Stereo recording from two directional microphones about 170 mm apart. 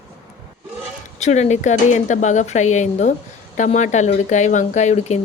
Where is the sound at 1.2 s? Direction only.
40° left (ahead or behind).